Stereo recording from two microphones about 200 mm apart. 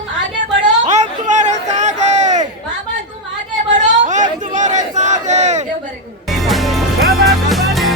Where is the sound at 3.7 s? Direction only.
40° right (ahead or behind).